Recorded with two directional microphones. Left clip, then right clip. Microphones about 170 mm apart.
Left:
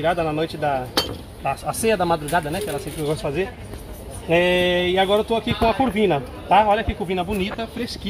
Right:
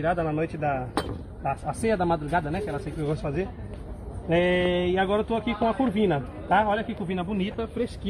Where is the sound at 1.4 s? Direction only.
20° left (ahead or behind).